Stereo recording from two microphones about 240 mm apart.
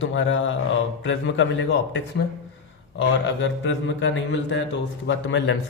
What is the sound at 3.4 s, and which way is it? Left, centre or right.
A man's voice, left.